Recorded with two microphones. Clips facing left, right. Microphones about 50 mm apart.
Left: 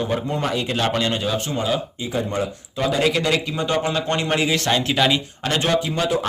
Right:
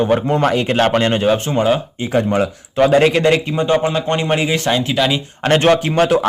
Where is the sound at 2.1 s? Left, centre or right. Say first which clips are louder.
Right 8 dB; right.